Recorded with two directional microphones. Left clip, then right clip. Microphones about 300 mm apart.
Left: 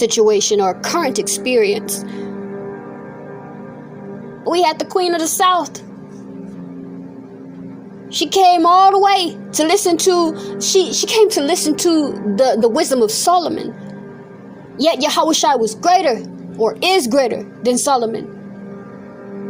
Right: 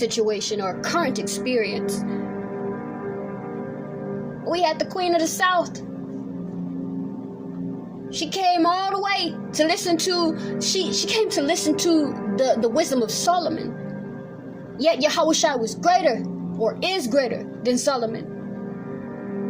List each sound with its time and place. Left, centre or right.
0.0 s a woman's voice: left
4.4 s a woman's voice: left
8.1 s a woman's voice: left
14.8 s a woman's voice: left